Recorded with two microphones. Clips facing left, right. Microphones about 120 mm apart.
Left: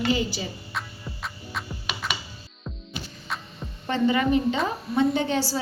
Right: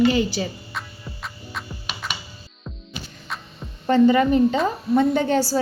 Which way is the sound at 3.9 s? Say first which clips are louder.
Right 6 dB; 40° right (ahead or behind).